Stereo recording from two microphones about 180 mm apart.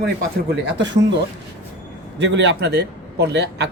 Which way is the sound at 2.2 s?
80° right.